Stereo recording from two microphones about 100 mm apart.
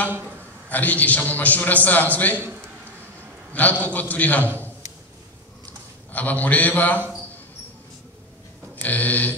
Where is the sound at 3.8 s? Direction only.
15° left (ahead or behind).